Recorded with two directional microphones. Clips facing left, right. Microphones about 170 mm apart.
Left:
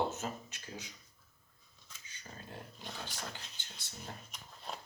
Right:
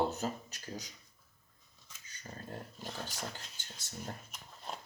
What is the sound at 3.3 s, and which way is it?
Speech, 45° right (ahead or behind).